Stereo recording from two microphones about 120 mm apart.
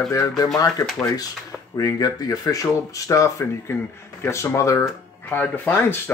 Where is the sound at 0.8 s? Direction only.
30° left (ahead or behind).